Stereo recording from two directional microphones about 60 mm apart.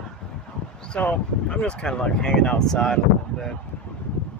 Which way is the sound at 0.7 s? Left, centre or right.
Centre.